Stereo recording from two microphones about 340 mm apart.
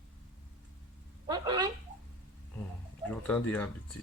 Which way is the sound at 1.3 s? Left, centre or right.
Centre.